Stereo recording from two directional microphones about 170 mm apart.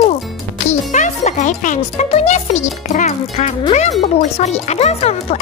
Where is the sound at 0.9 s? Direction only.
45° left (ahead or behind).